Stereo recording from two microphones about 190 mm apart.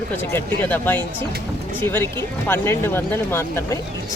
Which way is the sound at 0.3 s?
10° left (ahead or behind).